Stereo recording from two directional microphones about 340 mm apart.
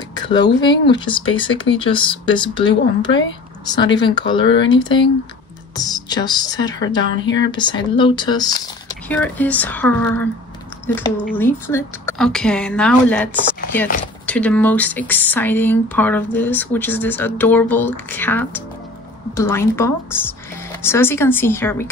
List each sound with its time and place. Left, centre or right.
0.1 s a sound: centre
0.6 s speech: centre
11.3 s speech: centre